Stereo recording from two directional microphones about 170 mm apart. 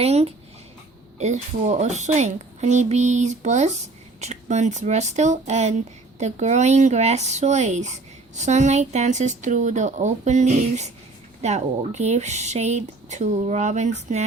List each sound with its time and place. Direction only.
0.0 s a woman's voice: 40° right (ahead or behind)